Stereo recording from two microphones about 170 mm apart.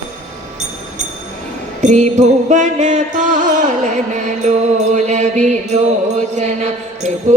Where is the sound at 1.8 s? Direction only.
45° right (ahead or behind).